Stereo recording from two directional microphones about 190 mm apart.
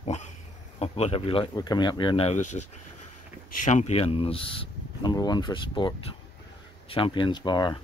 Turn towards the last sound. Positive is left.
turn(degrees=25)  # may be behind; listen again after turning